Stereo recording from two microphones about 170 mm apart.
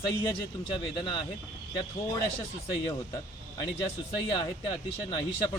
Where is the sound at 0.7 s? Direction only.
25° left (ahead or behind).